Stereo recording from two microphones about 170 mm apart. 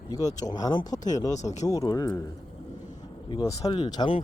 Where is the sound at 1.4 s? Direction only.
40° left (ahead or behind).